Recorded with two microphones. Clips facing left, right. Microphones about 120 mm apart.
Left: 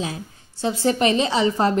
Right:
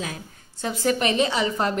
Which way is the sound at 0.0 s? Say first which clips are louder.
Left 4 dB; 30° left (ahead or behind).